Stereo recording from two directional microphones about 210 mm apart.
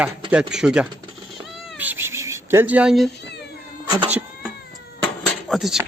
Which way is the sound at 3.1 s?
55° left (ahead or behind).